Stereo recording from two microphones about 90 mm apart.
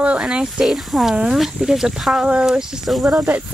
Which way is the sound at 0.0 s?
10° right (ahead or behind).